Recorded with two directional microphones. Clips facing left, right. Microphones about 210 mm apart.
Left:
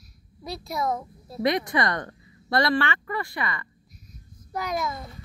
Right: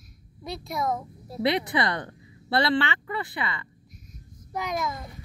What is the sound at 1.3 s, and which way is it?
Speech, 15° right (ahead or behind).